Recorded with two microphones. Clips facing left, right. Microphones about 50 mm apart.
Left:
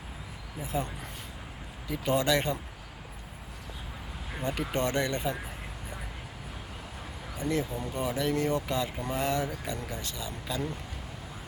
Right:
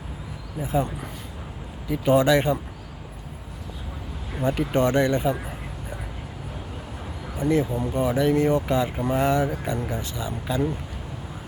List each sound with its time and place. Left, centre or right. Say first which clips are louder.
2.0 s speech: right 8 dB; right
4.4 s speech: right 8 dB; right
7.3 s speech: right 8 dB; right